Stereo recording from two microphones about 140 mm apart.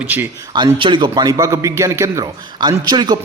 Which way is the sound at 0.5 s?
35° right (ahead or behind).